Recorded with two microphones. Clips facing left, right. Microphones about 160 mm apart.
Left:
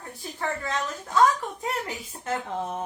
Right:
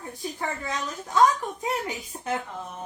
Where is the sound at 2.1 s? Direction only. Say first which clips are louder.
Right 2 dB; 15° right (ahead or behind).